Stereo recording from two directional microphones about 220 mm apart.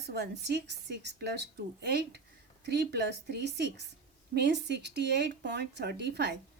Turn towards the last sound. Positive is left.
turn(degrees=-50)  # may be behind; listen again after turning